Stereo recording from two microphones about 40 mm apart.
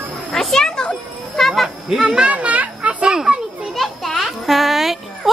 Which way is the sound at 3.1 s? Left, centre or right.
Centre.